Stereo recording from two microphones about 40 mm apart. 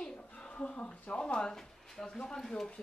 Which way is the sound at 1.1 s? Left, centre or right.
Left.